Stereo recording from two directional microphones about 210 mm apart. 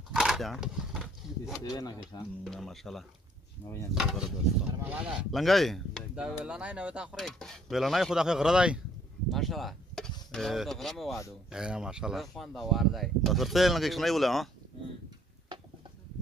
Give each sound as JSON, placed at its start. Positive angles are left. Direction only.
{"t": 0.1, "sound": "a sound", "side_deg": 0}
{"t": 1.8, "sound": "speech", "side_deg": 20}
{"t": 2.4, "sound": "speech", "side_deg": 0}
{"t": 3.6, "sound": "speech", "side_deg": 10}
{"t": 3.9, "sound": "speech", "side_deg": 0}